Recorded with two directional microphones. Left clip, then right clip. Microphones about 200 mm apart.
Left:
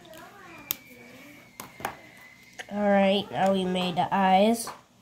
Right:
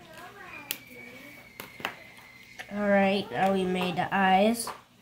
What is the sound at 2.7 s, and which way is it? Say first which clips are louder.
Speech: left 2 dB; 25° left (ahead or behind).